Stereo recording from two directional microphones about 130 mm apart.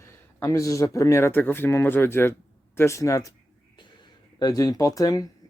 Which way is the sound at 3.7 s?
35° left (ahead or behind).